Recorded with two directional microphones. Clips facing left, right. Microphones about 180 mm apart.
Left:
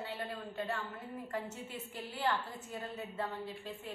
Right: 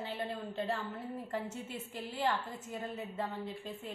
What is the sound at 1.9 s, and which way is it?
A woman's voice, 25° right (ahead or behind).